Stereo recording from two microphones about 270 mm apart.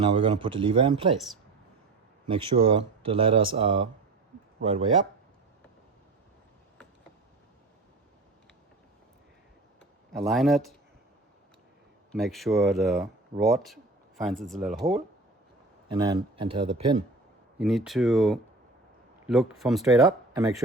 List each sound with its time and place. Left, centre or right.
0.2 s speech: centre
2.2 s speech: centre
10.1 s speech: centre
12.1 s speech: centre
15.9 s speech: centre
17.6 s speech: centre
20.3 s speech: centre